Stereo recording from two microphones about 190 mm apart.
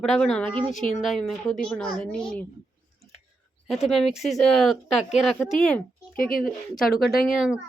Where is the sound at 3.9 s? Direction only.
Centre (ahead or behind).